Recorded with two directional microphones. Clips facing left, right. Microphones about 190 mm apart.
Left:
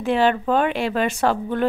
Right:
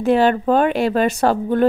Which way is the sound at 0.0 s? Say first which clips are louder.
Right 4 dB; 40° right (ahead or behind).